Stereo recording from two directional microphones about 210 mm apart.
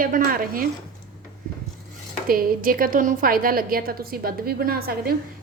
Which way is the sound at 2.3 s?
45° right (ahead or behind).